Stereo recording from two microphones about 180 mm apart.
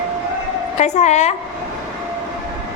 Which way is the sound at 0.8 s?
40° left (ahead or behind).